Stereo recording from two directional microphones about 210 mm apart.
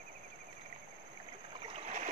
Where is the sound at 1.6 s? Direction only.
30° right (ahead or behind).